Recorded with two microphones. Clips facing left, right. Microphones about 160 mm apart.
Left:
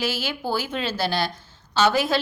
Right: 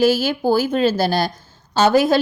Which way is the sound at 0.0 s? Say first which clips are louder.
Right 11 dB; 45° right (ahead or behind).